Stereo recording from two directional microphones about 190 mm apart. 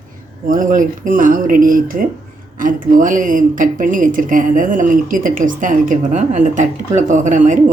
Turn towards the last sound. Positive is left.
turn(degrees=-40)  # may be behind; listen again after turning